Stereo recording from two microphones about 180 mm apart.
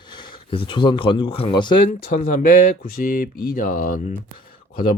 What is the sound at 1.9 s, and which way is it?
Speech, 50° left (ahead or behind).